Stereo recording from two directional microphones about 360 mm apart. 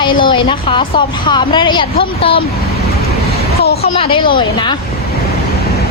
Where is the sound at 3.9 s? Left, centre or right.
Centre.